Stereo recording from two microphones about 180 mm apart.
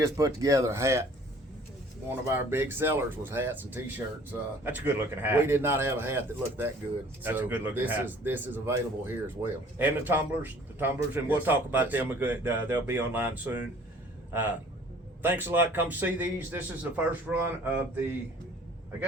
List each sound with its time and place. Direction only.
0.0 s speech: 20° right (ahead or behind)
2.0 s speech: 10° right (ahead or behind)
7.2 s speech: 10° right (ahead or behind)
15.2 s speech: 10° right (ahead or behind)